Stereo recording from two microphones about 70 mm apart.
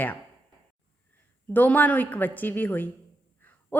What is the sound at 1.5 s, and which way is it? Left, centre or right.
Speech, left.